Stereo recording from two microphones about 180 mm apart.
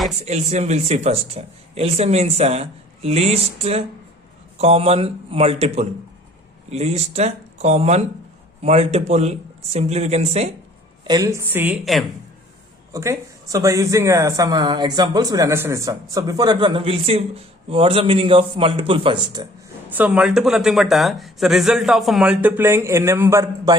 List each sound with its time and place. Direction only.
0.3 s speech: 40° right (ahead or behind)
11.0 s speech: 20° right (ahead or behind); by 12.0 s 5° right (ahead or behind)
12.9 s speech: 15° right (ahead or behind)
19.9 s speech: 10° right (ahead or behind)